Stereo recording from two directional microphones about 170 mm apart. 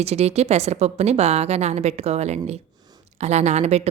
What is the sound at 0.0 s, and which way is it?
A woman's voice, 40° right (ahead or behind).